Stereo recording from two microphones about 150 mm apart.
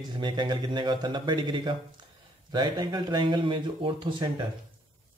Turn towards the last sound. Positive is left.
turn(degrees=-30)  # may be behind; listen again after turning